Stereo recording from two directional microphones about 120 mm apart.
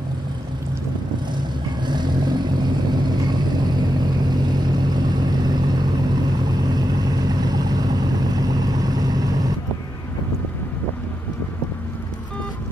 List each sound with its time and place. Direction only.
1.9 s vehicle: 40° right (ahead or behind)